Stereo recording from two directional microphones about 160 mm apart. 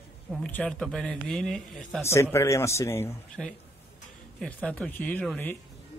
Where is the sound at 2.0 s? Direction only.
15° left (ahead or behind).